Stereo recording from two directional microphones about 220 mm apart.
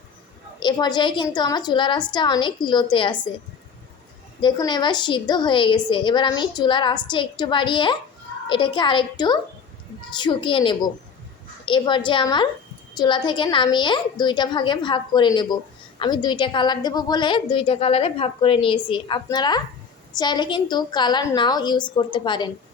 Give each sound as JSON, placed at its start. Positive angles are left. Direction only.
{"t": 0.6, "sound": "a woman's voice", "side_deg": 20}
{"t": 4.4, "sound": "a woman's voice", "side_deg": 20}